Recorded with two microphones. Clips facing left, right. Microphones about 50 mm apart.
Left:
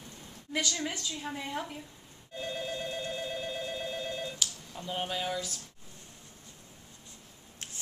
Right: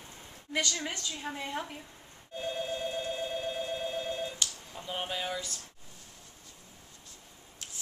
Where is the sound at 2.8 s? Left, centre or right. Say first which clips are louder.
Right 2 dB; right.